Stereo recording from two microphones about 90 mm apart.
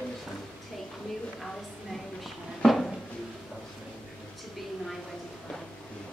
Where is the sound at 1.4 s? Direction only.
Centre (ahead or behind).